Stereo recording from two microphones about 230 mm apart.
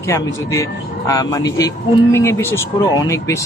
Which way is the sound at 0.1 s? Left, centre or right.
Centre.